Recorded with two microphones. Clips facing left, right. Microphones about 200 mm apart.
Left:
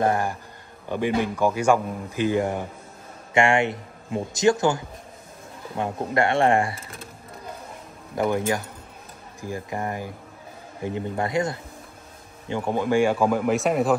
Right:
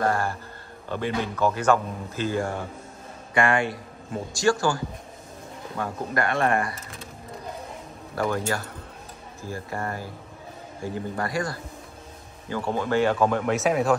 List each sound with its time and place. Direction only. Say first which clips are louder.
0.0 s speech: left 2 dB; 15° left (ahead or behind)
8.2 s speech: left 3 dB; 15° left (ahead or behind); by 13.9 s centre (ahead or behind)